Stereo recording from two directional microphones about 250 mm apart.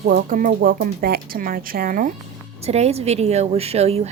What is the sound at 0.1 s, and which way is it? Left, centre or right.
A woman's voice, right.